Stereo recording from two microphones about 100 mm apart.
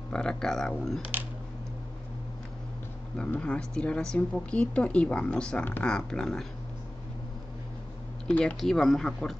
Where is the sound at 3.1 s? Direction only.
10° left (ahead or behind).